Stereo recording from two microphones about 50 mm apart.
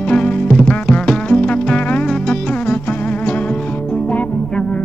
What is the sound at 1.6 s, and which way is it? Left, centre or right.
Insect, left.